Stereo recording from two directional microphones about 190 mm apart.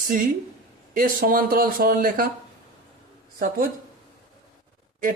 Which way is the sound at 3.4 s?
50° right (ahead or behind).